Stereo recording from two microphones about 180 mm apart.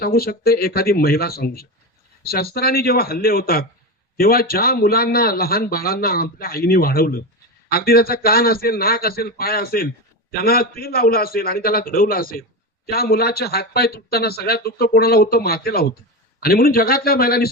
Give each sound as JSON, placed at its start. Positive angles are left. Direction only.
{"t": 0.0, "sound": "a man's voice", "side_deg": 55}